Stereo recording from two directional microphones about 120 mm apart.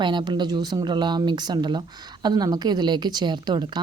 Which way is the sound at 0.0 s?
40° right (ahead or behind).